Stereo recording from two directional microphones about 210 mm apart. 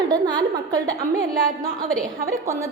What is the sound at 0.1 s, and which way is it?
Speech, 20° right (ahead or behind).